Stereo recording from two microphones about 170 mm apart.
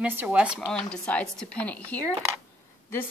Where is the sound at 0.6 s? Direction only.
5° left (ahead or behind).